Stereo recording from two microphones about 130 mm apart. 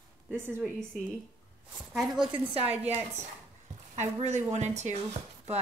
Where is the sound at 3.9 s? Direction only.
65° right (ahead or behind).